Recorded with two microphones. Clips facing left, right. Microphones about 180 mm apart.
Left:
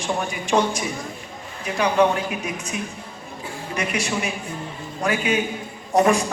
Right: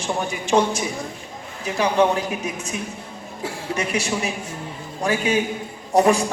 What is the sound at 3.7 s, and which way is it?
A man's voice, 25° right (ahead or behind).